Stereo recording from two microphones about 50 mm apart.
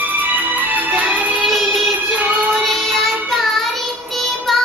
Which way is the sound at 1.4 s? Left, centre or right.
Centre.